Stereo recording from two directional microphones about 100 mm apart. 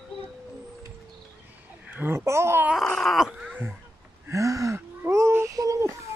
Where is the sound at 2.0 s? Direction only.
25° right (ahead or behind).